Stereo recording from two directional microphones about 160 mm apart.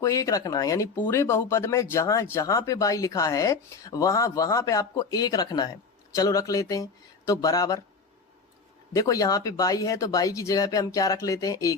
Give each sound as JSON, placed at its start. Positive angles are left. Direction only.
{"t": 0.0, "sound": "speech", "side_deg": 20}
{"t": 9.0, "sound": "speech", "side_deg": 20}